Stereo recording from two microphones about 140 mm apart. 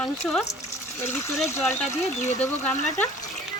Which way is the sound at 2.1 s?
55° left (ahead or behind).